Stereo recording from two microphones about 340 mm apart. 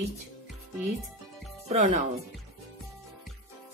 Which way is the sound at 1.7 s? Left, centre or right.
Centre.